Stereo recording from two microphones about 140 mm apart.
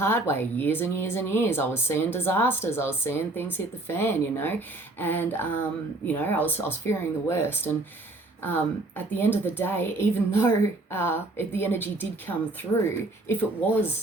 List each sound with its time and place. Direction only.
0.0 s speech: 15° left (ahead or behind)